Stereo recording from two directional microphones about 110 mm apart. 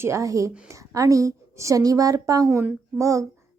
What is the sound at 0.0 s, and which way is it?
A woman's voice, 30° right (ahead or behind).